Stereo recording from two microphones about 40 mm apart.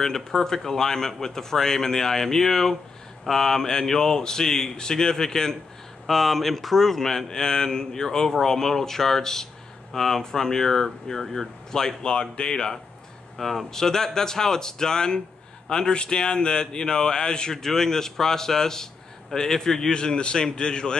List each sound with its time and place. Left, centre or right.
0.0 s speech: centre
12.0 s a man's voice: left
13.4 s a man's voice: centre; by 21.0 s left